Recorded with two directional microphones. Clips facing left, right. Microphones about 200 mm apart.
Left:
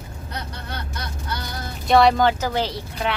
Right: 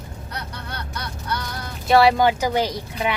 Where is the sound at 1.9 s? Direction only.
5° right (ahead or behind).